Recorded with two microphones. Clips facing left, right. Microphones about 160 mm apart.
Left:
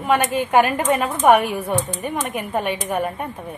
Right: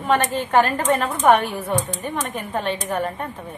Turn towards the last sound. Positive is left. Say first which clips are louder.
# left 1 dB
turn(degrees=10)  # may be behind; listen again after turning